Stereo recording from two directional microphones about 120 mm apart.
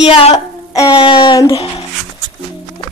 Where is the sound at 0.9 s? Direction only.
50° left (ahead or behind).